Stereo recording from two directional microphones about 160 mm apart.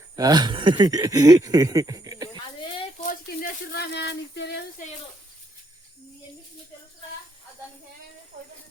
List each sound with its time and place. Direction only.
0.2 s speech: 25° right (ahead or behind)
2.3 s a sound: 30° left (ahead or behind)
3.1 s speech: 65° left (ahead or behind); by 4.6 s 90° left